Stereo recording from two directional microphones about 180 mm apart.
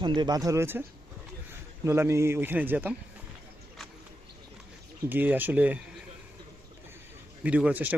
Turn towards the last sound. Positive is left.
turn(degrees=-10)  # may be behind; listen again after turning